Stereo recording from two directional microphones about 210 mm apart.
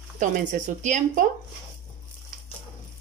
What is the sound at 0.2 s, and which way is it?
Speech, 35° right (ahead or behind).